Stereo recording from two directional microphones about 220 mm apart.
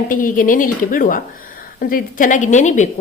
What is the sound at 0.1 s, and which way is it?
A woman's voice, 35° left (ahead or behind).